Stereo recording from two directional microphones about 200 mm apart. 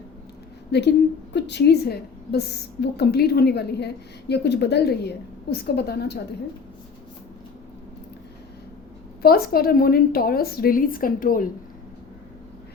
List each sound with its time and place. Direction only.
0.7 s a woman's voice: 60° left (ahead or behind)
9.2 s a woman's voice: 50° left (ahead or behind)